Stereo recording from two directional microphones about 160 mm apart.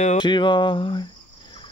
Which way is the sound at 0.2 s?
30° left (ahead or behind).